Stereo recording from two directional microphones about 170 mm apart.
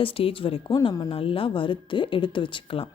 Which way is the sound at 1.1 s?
30° left (ahead or behind).